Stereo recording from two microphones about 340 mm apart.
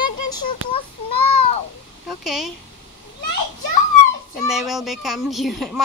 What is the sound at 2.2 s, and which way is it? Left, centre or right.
Speech, centre.